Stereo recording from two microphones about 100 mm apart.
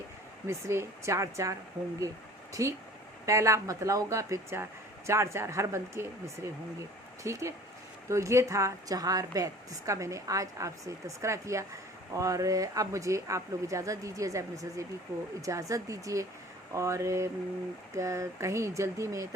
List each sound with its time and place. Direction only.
0.4 s a woman's voice: 25° right (ahead or behind)